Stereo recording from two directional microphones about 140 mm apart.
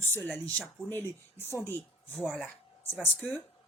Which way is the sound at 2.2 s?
Centre (ahead or behind).